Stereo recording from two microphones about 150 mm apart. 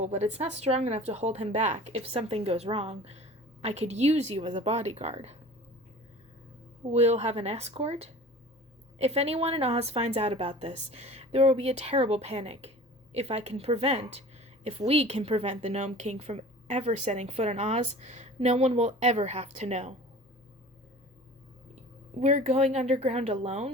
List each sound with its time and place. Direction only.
0.0 s a woman's voice: 50° right (ahead or behind)
6.9 s a woman's voice: 45° right (ahead or behind)
22.2 s a woman's voice: 50° right (ahead or behind)